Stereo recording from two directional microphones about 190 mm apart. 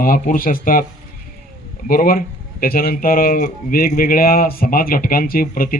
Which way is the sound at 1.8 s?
45° left (ahead or behind).